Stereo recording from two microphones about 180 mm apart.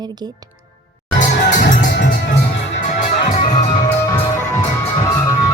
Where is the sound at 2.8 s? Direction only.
45° left (ahead or behind).